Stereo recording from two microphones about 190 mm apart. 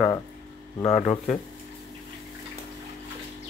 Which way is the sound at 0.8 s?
35° left (ahead or behind).